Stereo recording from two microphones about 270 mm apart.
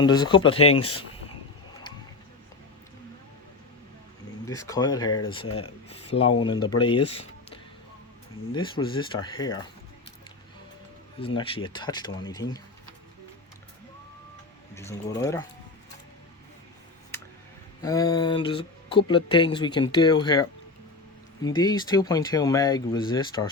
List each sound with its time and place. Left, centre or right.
0.0 s speech: centre
4.4 s speech: centre
11.2 s speech: centre
14.8 s speech: centre
17.1 s a sound: centre
17.8 s speech: centre